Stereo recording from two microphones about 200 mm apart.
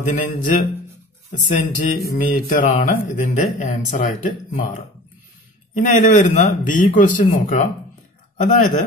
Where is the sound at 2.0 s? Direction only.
40° left (ahead or behind).